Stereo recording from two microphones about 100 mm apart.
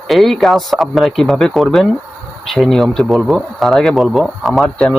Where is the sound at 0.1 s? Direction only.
Centre (ahead or behind).